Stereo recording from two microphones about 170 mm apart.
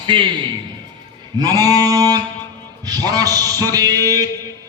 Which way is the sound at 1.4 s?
20° right (ahead or behind).